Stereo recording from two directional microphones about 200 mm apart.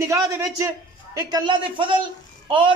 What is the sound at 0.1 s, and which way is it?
A man's voice, 15° right (ahead or behind).